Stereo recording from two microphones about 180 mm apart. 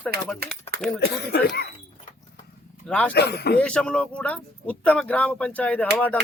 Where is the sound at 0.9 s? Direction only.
65° left (ahead or behind).